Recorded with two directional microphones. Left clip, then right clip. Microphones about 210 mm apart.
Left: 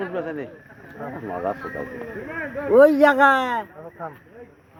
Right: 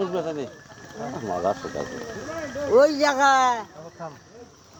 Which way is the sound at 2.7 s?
40° left (ahead or behind).